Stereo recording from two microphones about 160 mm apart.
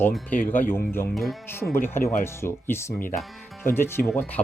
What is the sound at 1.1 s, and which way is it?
Speech, centre (ahead or behind).